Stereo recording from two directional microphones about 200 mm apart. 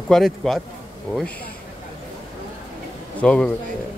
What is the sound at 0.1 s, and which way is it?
Speech, centre (ahead or behind).